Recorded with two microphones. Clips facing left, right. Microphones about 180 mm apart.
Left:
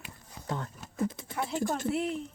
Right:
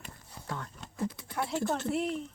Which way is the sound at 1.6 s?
10° left (ahead or behind).